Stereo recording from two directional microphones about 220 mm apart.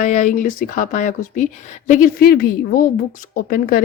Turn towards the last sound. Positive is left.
turn(degrees=40)  # may be behind; listen again after turning